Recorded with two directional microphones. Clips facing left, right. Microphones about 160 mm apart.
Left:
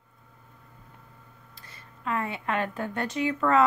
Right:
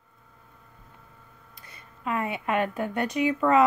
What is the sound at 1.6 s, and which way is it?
A woman's voice, 20° right (ahead or behind).